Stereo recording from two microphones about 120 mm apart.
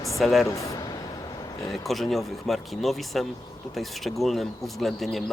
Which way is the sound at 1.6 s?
Centre (ahead or behind).